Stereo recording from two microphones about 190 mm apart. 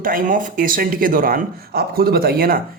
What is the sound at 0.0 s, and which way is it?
A man's voice, 45° right (ahead or behind).